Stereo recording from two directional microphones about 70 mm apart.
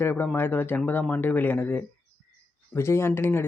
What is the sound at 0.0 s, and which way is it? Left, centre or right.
Speech, left.